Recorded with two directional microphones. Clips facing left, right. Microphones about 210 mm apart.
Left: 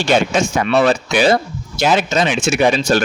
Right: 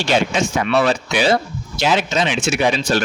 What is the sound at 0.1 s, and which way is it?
Speech, 45° left (ahead or behind).